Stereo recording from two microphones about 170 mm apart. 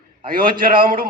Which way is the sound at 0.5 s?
55° right (ahead or behind).